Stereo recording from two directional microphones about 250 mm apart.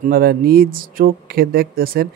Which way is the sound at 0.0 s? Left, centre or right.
Right.